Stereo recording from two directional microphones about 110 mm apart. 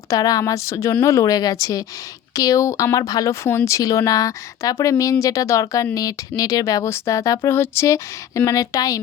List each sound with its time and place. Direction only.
0.1 s speech: 35° left (ahead or behind)